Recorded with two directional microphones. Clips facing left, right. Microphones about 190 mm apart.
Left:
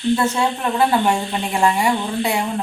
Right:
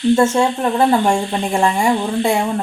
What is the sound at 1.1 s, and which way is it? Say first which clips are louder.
Speech: right 3 dB; 45° right (ahead or behind).